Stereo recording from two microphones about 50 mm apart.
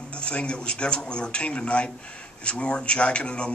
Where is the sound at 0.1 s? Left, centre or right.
Left.